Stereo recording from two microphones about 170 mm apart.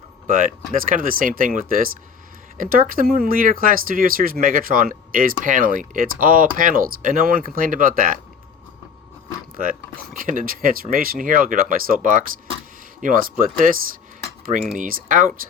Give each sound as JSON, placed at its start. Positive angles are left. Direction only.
{"t": 0.3, "sound": "speech", "side_deg": -50}
{"t": 10.2, "sound": "speech", "side_deg": -55}
{"t": 13.0, "sound": "speech", "side_deg": -55}
{"t": 14.8, "sound": "speech", "side_deg": -50}